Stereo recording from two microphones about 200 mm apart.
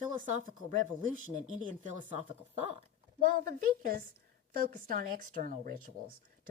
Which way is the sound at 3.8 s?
45° right (ahead or behind).